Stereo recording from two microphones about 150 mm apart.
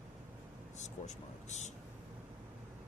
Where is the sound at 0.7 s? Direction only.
50° left (ahead or behind).